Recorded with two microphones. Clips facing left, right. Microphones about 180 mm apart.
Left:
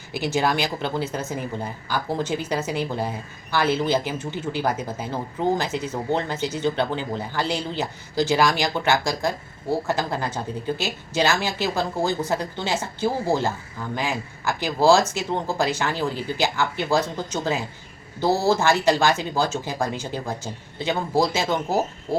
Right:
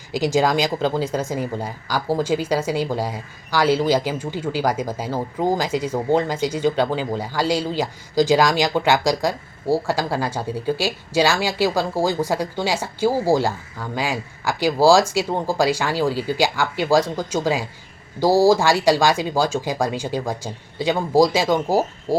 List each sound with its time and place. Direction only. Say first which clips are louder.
0.1 s speech: right 5 dB; 15° right (ahead or behind)
0.3 s speech: right 4 dB; 90° right
1.0 s speech: right 5 dB; 10° right (ahead or behind)